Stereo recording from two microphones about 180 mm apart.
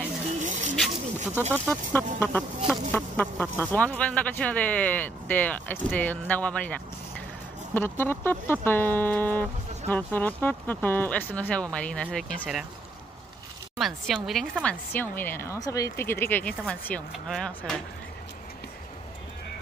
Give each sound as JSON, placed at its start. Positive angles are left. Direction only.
{"t": 0.4, "sound": "a sound", "side_deg": -45}
{"t": 1.5, "sound": "speech", "side_deg": 10}
{"t": 13.7, "sound": "speech", "side_deg": 0}